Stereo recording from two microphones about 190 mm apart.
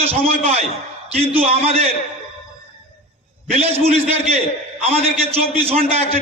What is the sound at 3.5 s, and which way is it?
A man's voice, 35° right (ahead or behind).